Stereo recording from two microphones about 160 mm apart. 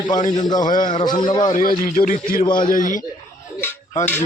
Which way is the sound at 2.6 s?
55° left (ahead or behind).